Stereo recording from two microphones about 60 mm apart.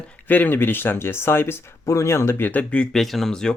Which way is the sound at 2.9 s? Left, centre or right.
Centre.